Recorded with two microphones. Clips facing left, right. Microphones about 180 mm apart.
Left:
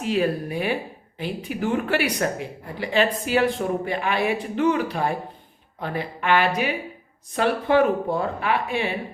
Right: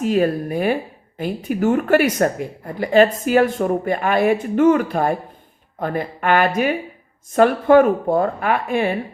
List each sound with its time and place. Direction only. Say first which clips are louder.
0.0 s speech: right 5 dB; 45° right (ahead or behind)